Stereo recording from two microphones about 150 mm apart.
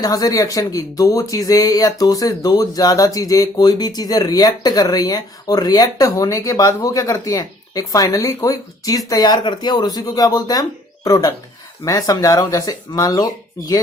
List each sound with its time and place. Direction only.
0.0 s speech: 25° left (ahead or behind)